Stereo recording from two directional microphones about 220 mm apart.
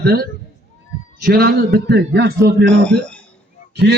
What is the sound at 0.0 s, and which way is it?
A man's voice, 45° right (ahead or behind).